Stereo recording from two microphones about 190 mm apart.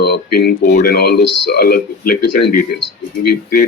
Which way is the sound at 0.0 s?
55° left (ahead or behind).